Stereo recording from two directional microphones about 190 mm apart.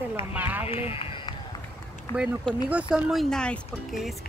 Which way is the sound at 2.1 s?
5° right (ahead or behind).